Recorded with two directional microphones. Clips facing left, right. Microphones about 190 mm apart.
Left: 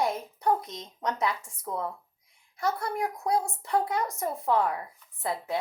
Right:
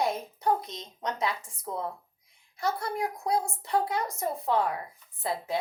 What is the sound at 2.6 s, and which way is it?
A woman's voice, 30° right (ahead or behind).